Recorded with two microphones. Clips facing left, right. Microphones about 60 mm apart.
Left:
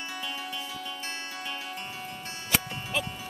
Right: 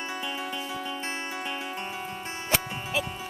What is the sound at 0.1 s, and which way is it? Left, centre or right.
Music, centre.